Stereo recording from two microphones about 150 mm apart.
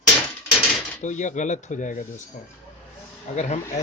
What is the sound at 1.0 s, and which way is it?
Speech, 55° left (ahead or behind).